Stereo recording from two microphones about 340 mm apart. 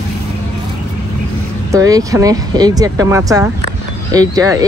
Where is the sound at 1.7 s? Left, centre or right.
Centre.